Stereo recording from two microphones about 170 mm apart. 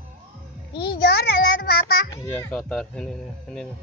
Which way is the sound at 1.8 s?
65° left (ahead or behind).